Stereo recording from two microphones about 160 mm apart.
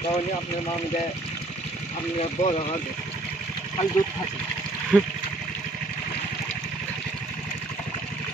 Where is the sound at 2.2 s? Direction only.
40° left (ahead or behind).